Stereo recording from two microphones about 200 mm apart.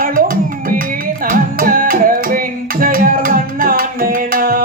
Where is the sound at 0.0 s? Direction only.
45° right (ahead or behind).